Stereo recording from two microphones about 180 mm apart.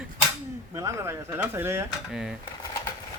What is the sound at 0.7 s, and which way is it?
Speech, 15° right (ahead or behind).